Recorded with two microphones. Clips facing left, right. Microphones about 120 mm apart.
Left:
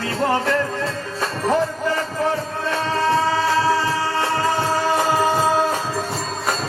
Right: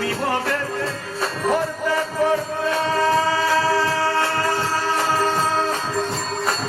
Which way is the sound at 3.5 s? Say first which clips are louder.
Left 1 dB; 20° left (ahead or behind).